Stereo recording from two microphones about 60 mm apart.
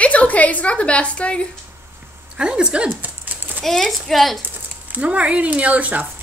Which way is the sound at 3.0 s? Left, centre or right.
Right.